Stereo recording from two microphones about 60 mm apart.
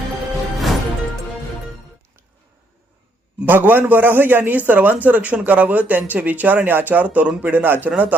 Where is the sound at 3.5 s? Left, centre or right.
Right.